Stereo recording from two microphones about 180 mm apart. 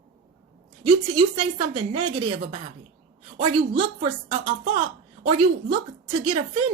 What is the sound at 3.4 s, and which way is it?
Speech, 30° right (ahead or behind).